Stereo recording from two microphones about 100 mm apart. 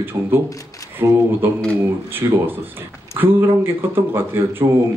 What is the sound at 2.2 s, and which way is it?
Speech, 35° right (ahead or behind).